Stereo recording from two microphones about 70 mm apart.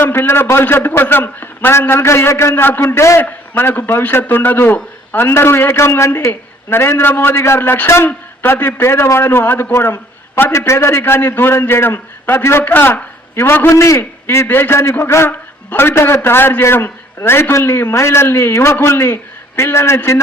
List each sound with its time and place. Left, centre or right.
0.0 s a man's voice: left
3.2 s a man's voice: left